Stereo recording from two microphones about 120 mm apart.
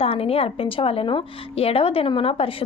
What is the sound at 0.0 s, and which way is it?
A woman's voice, 55° left (ahead or behind).